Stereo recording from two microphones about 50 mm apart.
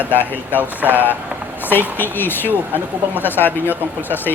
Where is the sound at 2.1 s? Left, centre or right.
Left.